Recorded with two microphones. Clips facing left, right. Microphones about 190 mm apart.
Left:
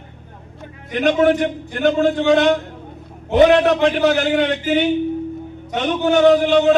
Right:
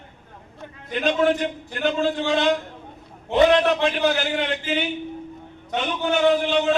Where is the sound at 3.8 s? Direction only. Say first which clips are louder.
Left 6 dB; 65° left (ahead or behind).